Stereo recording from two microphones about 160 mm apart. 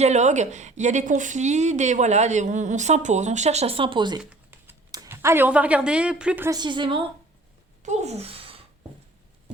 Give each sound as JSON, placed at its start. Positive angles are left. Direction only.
{"t": 0.0, "sound": "a woman's voice", "side_deg": -45}
{"t": 4.2, "sound": "typing", "side_deg": -10}
{"t": 4.9, "sound": "a woman's voice", "side_deg": -20}
{"t": 6.5, "sound": "a woman's voice", "side_deg": -30}
{"t": 7.8, "sound": "a sound", "side_deg": -45}